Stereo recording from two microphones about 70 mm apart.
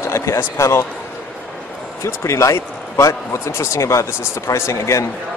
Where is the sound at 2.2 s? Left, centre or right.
Left.